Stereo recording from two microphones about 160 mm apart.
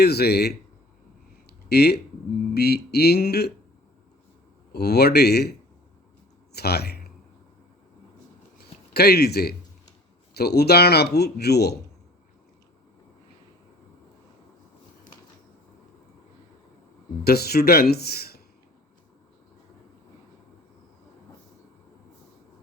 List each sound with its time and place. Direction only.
0.0 s speech: 90° left
1.5 s a sound: 90° left
2.6 s speech: 90° left
4.7 s speech: 90° left
8.5 s a sound: 85° left
10.3 s speech: 90° left
17.2 s speech: 80° left